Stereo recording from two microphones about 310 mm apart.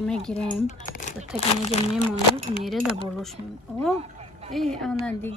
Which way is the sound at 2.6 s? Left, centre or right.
Centre.